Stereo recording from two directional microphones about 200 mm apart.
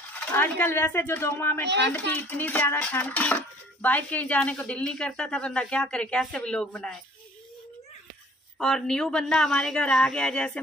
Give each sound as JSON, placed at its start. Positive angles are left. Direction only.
{"t": 0.1, "sound": "speech", "side_deg": 10}
{"t": 8.5, "sound": "speech", "side_deg": 0}